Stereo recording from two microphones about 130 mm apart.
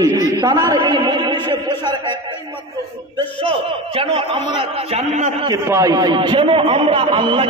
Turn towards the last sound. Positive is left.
turn(degrees=-40)  # may be behind; listen again after turning